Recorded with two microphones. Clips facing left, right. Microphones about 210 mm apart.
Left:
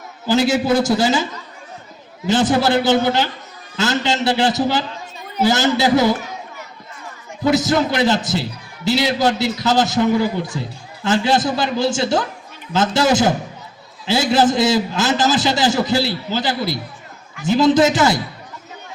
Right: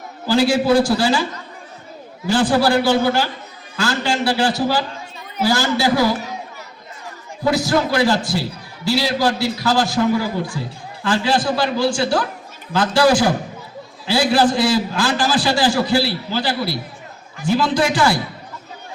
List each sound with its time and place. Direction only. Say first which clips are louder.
0.3 s a man's voice: right 1 dB; 20° left (ahead or behind)
7.5 s a man's voice: left 1 dB; 20° left (ahead or behind)